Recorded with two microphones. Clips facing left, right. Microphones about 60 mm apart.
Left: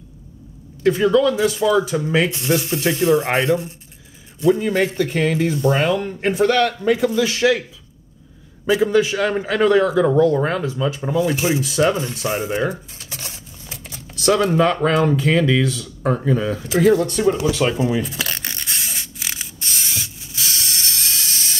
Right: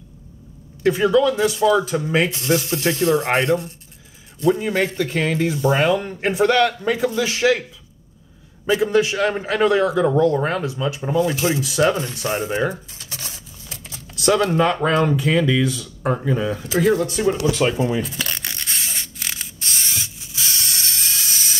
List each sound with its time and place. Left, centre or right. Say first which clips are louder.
0.8 s a man's voice: left 1 dB; centre
4.6 s a man's voice: left 2 dB; centre
8.6 s a man's voice: left 1 dB; centre
11.1 s speech: even; centre
13.0 s a sound: left 1 dB; centre
14.3 s speech: left 1 dB; centre
14.7 s a man's voice: left 1 dB; centre
17.0 s a sound: left 1 dB; centre